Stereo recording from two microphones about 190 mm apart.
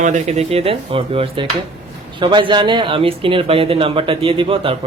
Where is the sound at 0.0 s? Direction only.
40° right (ahead or behind).